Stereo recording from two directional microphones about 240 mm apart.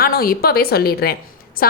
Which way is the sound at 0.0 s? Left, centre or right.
Left.